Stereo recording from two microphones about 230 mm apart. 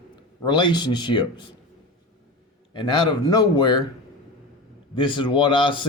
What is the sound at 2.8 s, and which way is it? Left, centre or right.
A man's voice, centre.